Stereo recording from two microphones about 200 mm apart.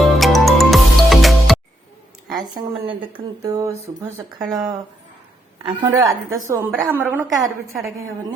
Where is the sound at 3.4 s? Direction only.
15° right (ahead or behind).